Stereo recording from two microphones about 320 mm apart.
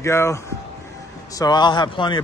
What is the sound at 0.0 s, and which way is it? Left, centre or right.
Speech, centre.